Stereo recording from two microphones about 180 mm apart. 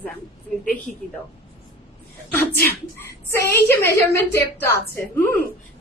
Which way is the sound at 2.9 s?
15° left (ahead or behind).